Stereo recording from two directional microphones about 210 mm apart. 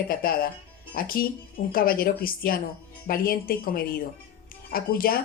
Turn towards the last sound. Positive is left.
turn(degrees=45)  # may be behind; listen again after turning